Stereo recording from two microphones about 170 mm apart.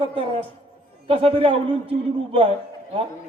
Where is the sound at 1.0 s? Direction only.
35° right (ahead or behind).